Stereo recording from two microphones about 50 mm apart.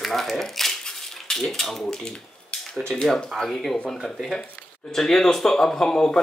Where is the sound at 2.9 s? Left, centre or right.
Centre.